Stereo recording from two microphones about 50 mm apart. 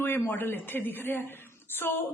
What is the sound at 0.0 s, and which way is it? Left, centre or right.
A woman's voice, left.